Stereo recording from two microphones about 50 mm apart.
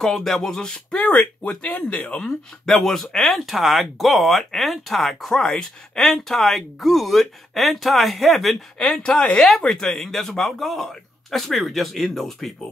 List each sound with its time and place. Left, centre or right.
0.0 s speech: centre
0.6 s speech: centre
2.2 s speech: centre
8.7 s speech: centre